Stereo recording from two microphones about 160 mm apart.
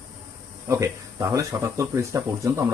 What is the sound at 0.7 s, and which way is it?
Speech, 20° right (ahead or behind).